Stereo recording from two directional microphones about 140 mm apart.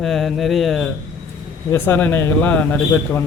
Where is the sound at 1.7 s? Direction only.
15° left (ahead or behind).